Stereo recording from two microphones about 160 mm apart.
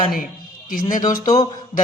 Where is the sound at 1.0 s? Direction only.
25° left (ahead or behind).